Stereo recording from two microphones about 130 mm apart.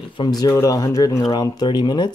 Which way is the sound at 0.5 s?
25° left (ahead or behind).